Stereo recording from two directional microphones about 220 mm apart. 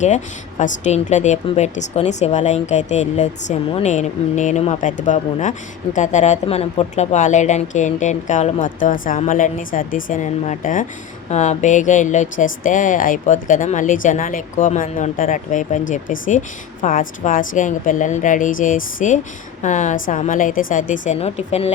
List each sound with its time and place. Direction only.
0.6 s speech: 35° left (ahead or behind)